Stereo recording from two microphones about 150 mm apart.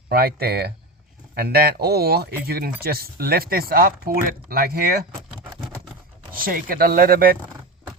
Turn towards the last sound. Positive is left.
turn(degrees=-75)  # may be behind; listen again after turning